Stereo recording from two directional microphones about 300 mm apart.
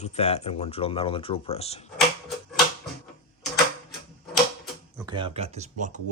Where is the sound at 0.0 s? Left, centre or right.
Left.